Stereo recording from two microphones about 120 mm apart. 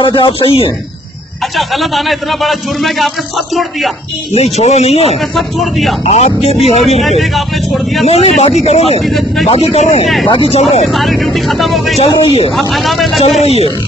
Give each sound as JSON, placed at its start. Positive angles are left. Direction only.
{"t": 0.0, "sound": "a man's voice", "side_deg": 45}
{"t": 1.6, "sound": "speech", "side_deg": 0}
{"t": 4.3, "sound": "speech", "side_deg": 65}
{"t": 5.3, "sound": "speech", "side_deg": 0}
{"t": 6.0, "sound": "speech", "side_deg": 65}
{"t": 7.2, "sound": "speech", "side_deg": 0}
{"t": 8.0, "sound": "speech", "side_deg": 60}
{"t": 10.9, "sound": "speech", "side_deg": 0}
{"t": 12.0, "sound": "a man's voice", "side_deg": 55}
{"t": 12.5, "sound": "speech", "side_deg": 0}
{"t": 13.4, "sound": "speech", "side_deg": 60}